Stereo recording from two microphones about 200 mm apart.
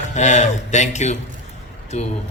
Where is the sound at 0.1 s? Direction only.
35° left (ahead or behind).